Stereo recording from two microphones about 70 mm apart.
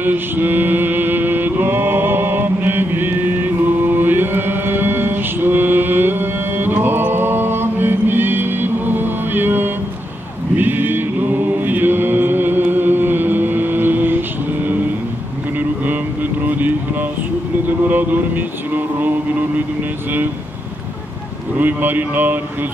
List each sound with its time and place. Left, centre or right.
0.0 s mantra: right
10.6 s chant: right
15.8 s vehicle: right
17.8 s mantra: right
21.5 s a man's voice: right